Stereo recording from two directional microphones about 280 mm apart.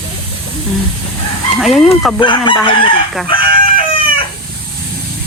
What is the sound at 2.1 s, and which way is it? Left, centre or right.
Chicken, centre.